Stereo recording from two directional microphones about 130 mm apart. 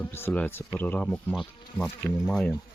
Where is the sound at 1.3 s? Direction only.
Centre (ahead or behind).